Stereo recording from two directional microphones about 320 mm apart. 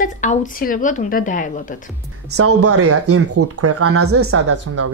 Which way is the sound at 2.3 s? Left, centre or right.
Right.